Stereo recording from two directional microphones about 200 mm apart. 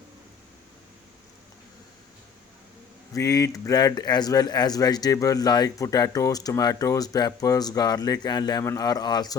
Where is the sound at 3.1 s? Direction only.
15° left (ahead or behind).